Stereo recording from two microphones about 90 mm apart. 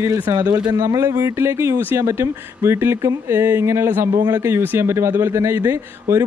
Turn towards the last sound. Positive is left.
turn(degrees=-30)  # may be behind; listen again after turning